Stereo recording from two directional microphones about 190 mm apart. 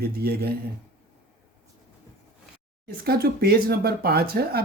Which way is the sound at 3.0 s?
55° right (ahead or behind).